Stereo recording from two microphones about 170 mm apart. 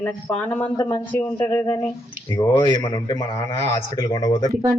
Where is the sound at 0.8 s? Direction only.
25° left (ahead or behind).